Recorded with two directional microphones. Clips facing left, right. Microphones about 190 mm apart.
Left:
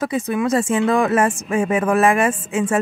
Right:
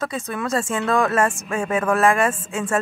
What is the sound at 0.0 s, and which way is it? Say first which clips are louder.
Speech: left 6 dB; 15° left (ahead or behind).